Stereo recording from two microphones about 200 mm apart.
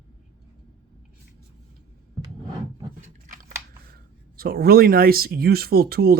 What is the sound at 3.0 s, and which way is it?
Scissors, 40° right (ahead or behind).